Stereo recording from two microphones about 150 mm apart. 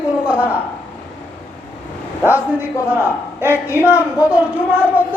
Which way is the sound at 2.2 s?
10° right (ahead or behind).